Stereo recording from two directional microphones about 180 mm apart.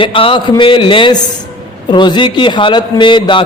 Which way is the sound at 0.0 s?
30° left (ahead or behind).